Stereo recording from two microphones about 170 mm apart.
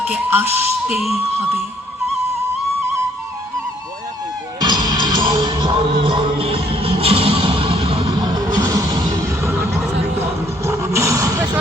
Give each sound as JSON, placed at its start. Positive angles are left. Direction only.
{"t": 0.1, "sound": "speech", "side_deg": -10}
{"t": 4.6, "sound": "music", "side_deg": -25}